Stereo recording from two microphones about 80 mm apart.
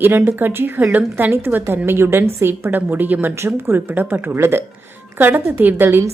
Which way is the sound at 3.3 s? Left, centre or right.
Right.